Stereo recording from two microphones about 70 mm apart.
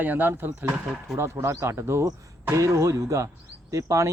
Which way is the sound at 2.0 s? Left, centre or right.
Right.